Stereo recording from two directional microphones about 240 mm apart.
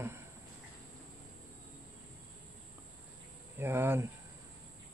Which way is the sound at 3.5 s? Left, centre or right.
Centre.